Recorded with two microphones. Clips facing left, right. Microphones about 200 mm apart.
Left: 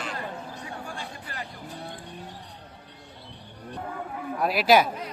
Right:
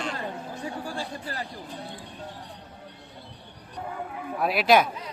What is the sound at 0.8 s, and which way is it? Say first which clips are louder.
Chatter: right 5 dB; 35° right (ahead or behind).